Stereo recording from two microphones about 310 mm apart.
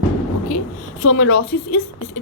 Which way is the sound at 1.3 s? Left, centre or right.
Left.